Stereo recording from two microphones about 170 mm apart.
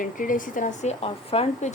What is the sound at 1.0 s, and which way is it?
Speech, 35° left (ahead or behind).